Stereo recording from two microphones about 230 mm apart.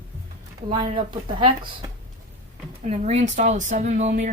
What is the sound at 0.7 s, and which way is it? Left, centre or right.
Speech, right.